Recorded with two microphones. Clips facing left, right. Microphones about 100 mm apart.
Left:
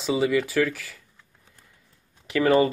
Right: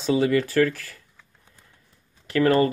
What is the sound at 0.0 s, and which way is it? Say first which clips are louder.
Speech: right 2 dB; 10° left (ahead or behind).